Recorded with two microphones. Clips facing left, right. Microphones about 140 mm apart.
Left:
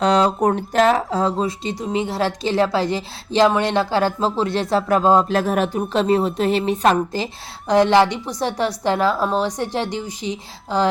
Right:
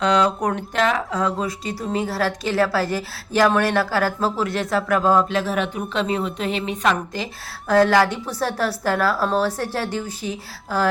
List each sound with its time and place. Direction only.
0.0 s speech: 35° left (ahead or behind)
5.3 s a woman's voice: 45° left (ahead or behind)
7.7 s speech: 20° left (ahead or behind)